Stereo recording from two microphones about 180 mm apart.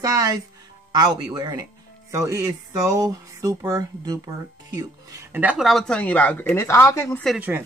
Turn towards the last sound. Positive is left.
turn(degrees=0)  # may be behind; listen again after turning